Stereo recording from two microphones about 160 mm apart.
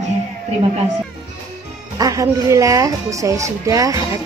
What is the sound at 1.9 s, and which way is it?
A woman's voice, 20° right (ahead or behind).